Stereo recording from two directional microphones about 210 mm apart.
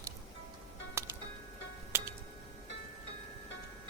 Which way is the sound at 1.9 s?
10° right (ahead or behind).